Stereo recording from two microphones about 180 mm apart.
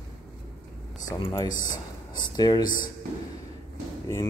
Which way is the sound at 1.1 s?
20° left (ahead or behind).